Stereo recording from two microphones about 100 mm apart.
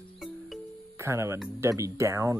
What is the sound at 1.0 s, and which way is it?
Speech, 30° right (ahead or behind).